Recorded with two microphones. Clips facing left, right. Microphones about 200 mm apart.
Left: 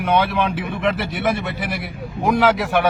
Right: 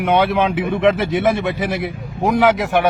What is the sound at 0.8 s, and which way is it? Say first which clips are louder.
A man's voice: right 5 dB; 25° right (ahead or behind).